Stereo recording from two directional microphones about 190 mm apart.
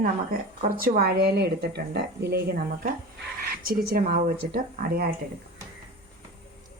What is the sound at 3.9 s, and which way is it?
Speech, 50° right (ahead or behind).